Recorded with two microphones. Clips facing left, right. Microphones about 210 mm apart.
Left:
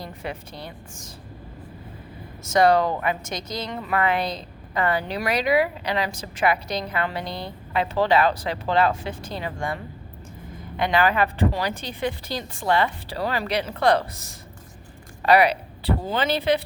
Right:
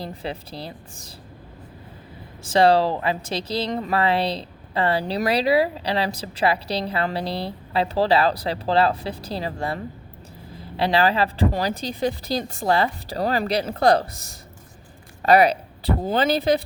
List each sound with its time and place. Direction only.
0.0 s speech: 30° right (ahead or behind)
2.4 s speech: 30° right (ahead or behind)
15.2 s speech: 45° right (ahead or behind)